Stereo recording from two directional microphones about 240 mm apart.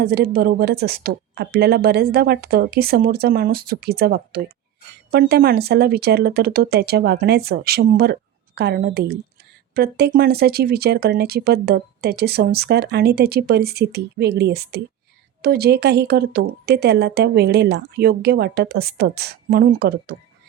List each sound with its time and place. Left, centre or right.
0.0 s speech: right